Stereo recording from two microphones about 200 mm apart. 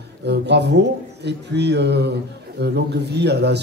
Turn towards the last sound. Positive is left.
turn(degrees=-55)  # may be behind; listen again after turning